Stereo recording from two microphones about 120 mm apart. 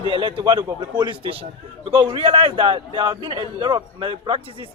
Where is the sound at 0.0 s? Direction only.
45° right (ahead or behind).